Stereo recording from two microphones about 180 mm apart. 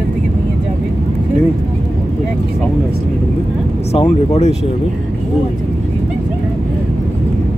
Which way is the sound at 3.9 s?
35° left (ahead or behind).